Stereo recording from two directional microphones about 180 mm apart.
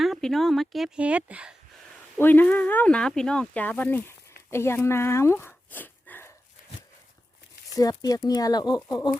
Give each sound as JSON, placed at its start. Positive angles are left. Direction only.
{"t": 0.0, "sound": "speech", "side_deg": 0}
{"t": 2.1, "sound": "speech", "side_deg": 10}
{"t": 7.8, "sound": "speech", "side_deg": 20}